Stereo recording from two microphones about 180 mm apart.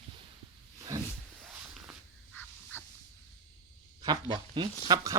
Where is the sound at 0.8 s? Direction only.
20° right (ahead or behind).